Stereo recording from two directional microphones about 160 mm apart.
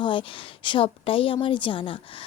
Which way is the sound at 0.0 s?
30° left (ahead or behind).